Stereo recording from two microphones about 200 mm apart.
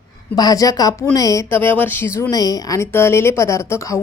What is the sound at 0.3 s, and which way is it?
A woman's voice, 20° left (ahead or behind).